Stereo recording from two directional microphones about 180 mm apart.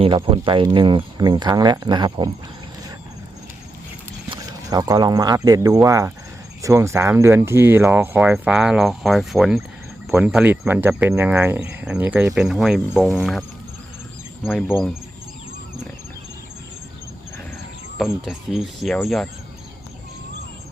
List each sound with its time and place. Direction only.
0.0 s speech: 30° right (ahead or behind)
4.3 s speech: 20° right (ahead or behind); by 13.4 s centre (ahead or behind)
14.4 s speech: 10° left (ahead or behind)
17.9 s speech: centre (ahead or behind)